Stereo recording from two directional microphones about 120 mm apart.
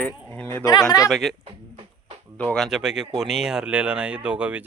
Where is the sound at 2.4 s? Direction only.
5° left (ahead or behind).